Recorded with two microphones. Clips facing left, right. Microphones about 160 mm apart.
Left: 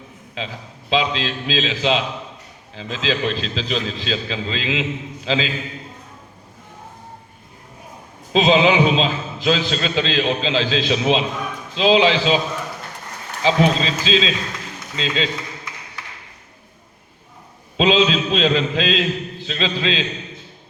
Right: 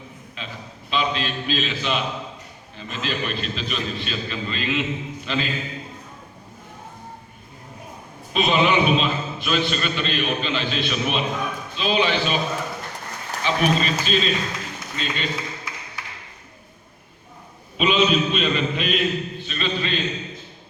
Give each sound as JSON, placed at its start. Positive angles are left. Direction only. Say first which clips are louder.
{"t": 0.3, "sound": "a man's voice", "louder": "left 6 dB", "side_deg": 90}
{"t": 8.3, "sound": "a man's voice", "louder": "left 5 dB", "side_deg": 90}
{"t": 13.4, "sound": "a man's voice", "louder": "left 4 dB", "side_deg": 90}
{"t": 17.7, "sound": "a man's voice", "louder": "left 3 dB", "side_deg": 90}